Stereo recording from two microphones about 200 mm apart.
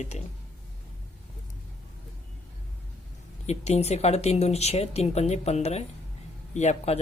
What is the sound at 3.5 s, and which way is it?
Speech, 35° left (ahead or behind).